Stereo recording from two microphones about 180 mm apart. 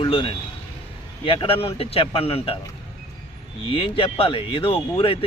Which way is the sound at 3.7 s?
30° left (ahead or behind).